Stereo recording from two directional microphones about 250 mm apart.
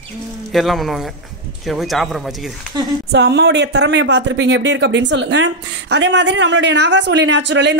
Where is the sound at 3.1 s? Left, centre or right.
Right.